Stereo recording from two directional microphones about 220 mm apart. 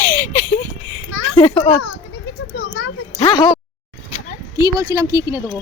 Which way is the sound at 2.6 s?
45° left (ahead or behind).